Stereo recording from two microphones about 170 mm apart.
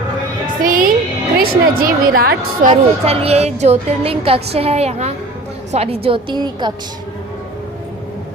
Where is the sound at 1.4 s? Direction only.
60° right (ahead or behind).